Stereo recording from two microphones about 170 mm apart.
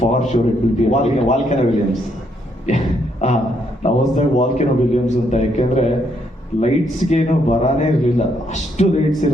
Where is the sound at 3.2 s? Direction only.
45° left (ahead or behind).